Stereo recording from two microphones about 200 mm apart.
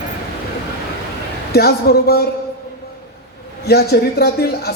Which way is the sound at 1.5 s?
50° left (ahead or behind).